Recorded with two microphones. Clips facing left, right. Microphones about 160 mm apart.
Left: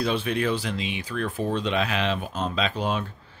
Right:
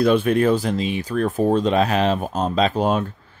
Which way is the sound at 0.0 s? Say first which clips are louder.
Right 9 dB; 50° right (ahead or behind).